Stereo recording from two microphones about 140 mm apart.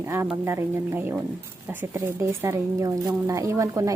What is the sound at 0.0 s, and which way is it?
Speech, 20° right (ahead or behind).